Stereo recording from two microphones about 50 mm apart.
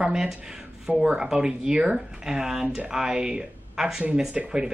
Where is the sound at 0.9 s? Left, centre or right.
Centre.